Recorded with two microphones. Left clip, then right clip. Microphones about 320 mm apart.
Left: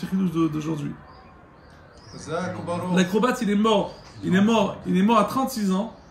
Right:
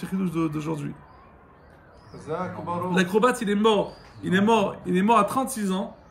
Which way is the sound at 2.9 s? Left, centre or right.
Centre.